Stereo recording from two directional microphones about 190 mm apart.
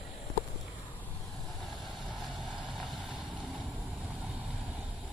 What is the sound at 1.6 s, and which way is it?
Vehicle, centre (ahead or behind).